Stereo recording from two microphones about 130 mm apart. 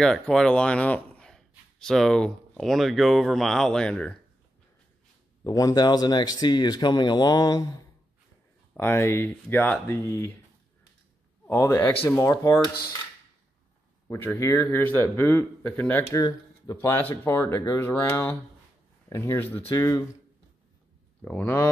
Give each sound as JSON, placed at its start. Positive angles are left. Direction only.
{"t": 0.0, "sound": "speech", "side_deg": 5}
{"t": 5.4, "sound": "a man's voice", "side_deg": 25}
{"t": 11.4, "sound": "speech", "side_deg": 20}
{"t": 14.0, "sound": "a man's voice", "side_deg": 20}
{"t": 16.1, "sound": "a man's voice", "side_deg": 25}
{"t": 21.2, "sound": "a man's voice", "side_deg": 10}